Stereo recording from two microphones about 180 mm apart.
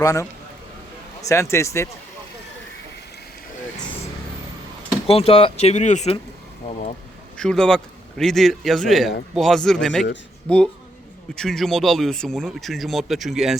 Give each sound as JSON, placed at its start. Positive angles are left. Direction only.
{"t": 0.0, "sound": "speech", "side_deg": 20}
{"t": 1.3, "sound": "speech", "side_deg": 15}
{"t": 5.0, "sound": "speech", "side_deg": 35}
{"t": 7.3, "sound": "speech", "side_deg": 5}